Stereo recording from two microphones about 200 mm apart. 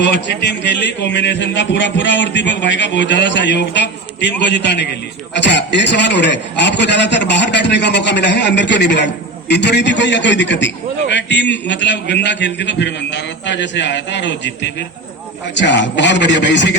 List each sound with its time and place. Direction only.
0.0 s a man's voice: 60° left (ahead or behind)